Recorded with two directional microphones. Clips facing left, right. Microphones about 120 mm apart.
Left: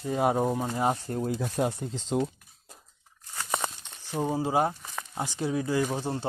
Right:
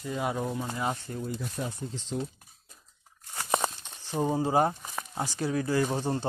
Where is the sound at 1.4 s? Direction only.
85° left.